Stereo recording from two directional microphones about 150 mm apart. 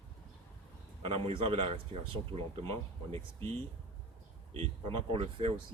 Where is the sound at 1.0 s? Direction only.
35° right (ahead or behind).